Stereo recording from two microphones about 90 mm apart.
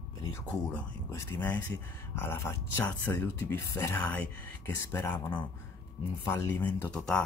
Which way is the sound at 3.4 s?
30° left (ahead or behind).